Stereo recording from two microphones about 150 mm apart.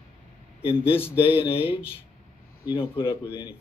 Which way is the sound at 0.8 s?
40° left (ahead or behind).